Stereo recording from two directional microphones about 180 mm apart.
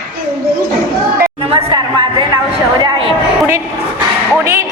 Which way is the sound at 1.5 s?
25° right (ahead or behind).